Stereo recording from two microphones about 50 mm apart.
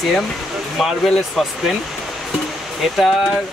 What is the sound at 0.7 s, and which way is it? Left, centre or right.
Speech, centre.